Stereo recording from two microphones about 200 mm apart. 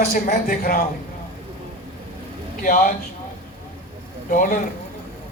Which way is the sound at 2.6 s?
35° left (ahead or behind).